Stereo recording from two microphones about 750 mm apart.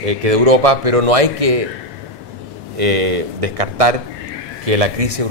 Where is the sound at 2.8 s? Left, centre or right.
Right.